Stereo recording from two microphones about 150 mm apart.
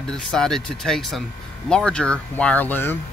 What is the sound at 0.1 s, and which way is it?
Speech, 5° left (ahead or behind).